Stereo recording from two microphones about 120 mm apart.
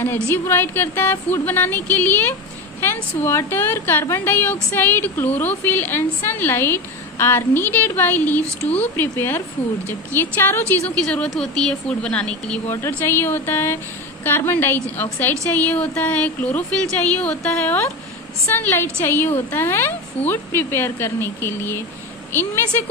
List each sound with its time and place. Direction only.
0.0 s a woman's voice: 20° left (ahead or behind)